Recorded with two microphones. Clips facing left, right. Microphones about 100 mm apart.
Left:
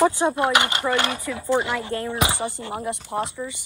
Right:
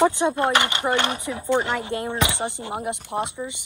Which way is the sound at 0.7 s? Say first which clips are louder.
Even; 25° right (ahead or behind).